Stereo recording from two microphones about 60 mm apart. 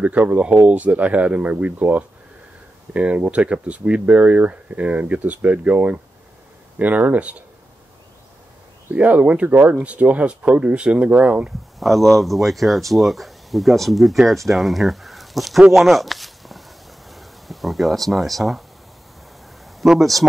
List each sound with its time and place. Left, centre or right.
0.0 s speech: right
8.9 s speech: right
11.8 s speech: centre
15.7 s a sound: centre
17.1 s speech: centre
19.8 s speech: centre